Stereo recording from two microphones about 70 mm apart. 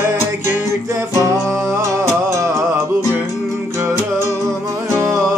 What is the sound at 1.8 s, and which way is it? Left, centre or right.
Music, right.